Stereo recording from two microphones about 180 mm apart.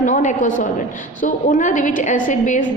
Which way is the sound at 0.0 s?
45° left (ahead or behind).